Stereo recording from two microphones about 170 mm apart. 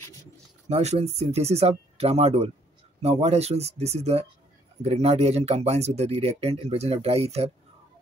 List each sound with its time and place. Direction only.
0.7 s speech: 40° right (ahead or behind)